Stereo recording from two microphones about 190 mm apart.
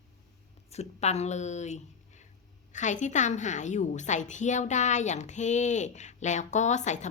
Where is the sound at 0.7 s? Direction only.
35° left (ahead or behind).